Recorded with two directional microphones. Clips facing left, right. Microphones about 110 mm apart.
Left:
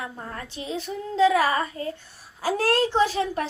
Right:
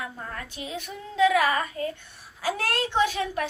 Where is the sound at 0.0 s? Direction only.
30° left (ahead or behind).